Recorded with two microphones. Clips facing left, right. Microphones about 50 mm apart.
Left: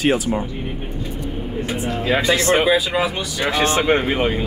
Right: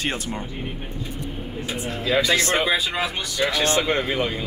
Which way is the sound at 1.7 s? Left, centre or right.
Left.